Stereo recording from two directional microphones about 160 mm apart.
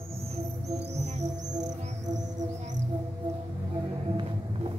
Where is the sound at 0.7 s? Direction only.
45° right (ahead or behind).